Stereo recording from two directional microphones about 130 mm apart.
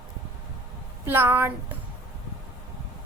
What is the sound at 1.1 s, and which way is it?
Speech, 15° right (ahead or behind).